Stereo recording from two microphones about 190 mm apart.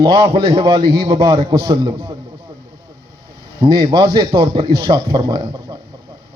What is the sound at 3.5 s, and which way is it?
A man's voice, 25° right (ahead or behind).